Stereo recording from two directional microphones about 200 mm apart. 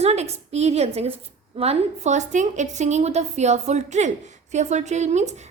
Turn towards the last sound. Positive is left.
turn(degrees=-35)  # may be behind; listen again after turning